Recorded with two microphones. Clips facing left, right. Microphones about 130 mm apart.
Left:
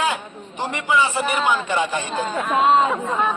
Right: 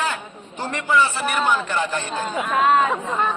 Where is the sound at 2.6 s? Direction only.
25° left (ahead or behind).